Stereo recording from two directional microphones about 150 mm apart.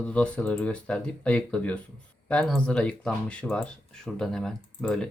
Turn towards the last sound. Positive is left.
turn(degrees=5)  # may be behind; listen again after turning